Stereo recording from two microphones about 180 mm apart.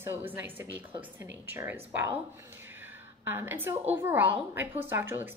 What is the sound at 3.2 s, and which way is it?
A woman's voice, 10° right (ahead or behind).